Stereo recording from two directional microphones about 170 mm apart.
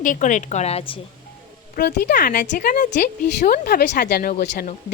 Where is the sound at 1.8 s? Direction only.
70° left (ahead or behind).